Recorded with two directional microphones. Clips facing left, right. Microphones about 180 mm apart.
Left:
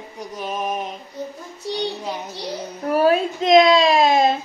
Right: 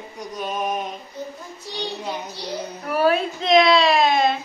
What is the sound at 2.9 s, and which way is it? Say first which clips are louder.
A woman's voice: left 3 dB; 40° left (ahead or behind).